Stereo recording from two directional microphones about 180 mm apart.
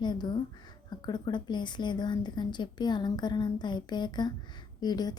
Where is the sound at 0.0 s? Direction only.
25° left (ahead or behind).